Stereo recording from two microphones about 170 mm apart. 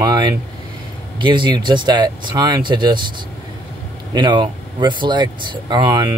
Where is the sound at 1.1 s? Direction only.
30° right (ahead or behind).